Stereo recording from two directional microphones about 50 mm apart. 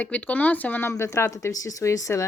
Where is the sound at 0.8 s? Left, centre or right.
Left.